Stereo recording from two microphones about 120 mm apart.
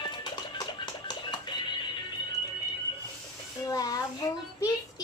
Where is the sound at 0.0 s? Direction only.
40° left (ahead or behind).